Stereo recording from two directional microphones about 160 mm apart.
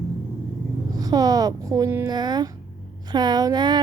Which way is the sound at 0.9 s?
25° right (ahead or behind).